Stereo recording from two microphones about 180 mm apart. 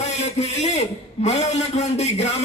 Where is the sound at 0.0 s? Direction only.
35° left (ahead or behind).